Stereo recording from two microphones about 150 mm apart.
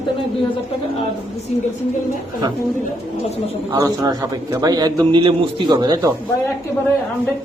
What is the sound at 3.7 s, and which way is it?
A man's voice, 25° right (ahead or behind).